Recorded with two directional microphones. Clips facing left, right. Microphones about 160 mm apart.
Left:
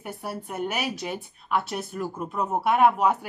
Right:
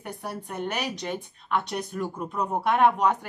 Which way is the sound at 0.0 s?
5° left (ahead or behind).